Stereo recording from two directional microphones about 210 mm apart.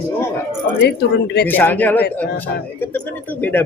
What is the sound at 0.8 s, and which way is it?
Speech, 55° left (ahead or behind).